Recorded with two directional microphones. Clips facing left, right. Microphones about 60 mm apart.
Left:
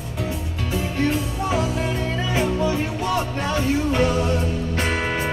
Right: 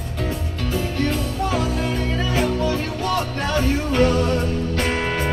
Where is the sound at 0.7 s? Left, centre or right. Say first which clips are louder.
Left 1 dB; left.